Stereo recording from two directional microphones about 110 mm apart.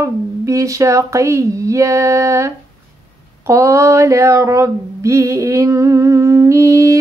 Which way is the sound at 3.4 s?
25° right (ahead or behind).